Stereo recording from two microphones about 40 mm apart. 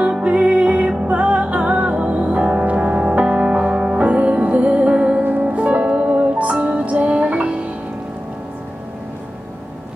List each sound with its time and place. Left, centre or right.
0.2 s music: right
4.0 s music: right
5.2 s music: right
5.6 s music: right